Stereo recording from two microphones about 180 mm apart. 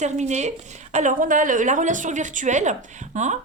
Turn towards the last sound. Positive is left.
turn(degrees=-40)  # may be behind; listen again after turning